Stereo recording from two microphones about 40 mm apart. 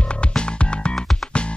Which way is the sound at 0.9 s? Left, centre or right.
Centre.